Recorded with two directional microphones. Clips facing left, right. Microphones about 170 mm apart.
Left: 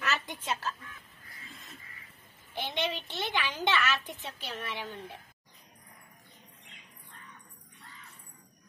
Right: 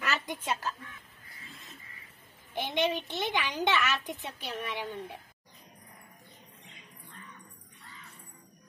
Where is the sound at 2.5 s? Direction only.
15° right (ahead or behind).